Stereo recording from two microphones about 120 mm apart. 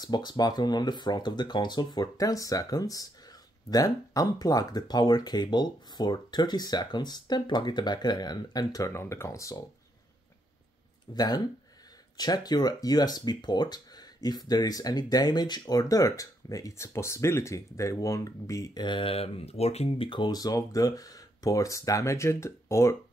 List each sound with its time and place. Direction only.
0.0 s speech: 35° left (ahead or behind)
11.1 s speech: 30° left (ahead or behind)
18.9 s speech: 45° left (ahead or behind)
20.1 s speech: 40° left (ahead or behind)